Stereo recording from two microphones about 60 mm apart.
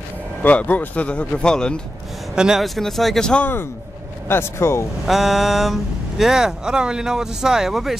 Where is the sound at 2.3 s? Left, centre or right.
Centre.